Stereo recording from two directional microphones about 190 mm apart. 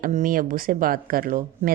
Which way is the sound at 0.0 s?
45° right (ahead or behind).